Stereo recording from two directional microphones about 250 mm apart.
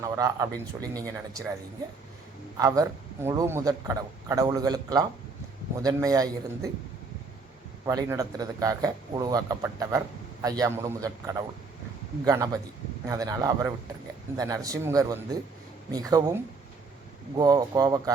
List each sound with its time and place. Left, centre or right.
0.0 s a man's voice: centre
2.6 s a man's voice: centre
7.9 s a man's voice: centre